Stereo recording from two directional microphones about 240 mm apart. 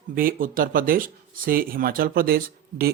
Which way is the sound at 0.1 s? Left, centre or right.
Right.